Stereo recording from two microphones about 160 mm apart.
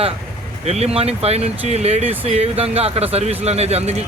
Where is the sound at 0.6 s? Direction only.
40° right (ahead or behind).